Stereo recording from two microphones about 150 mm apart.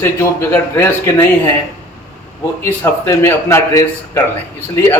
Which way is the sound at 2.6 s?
15° left (ahead or behind).